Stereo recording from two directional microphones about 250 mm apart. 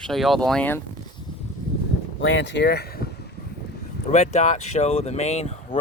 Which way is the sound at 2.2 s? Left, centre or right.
Left.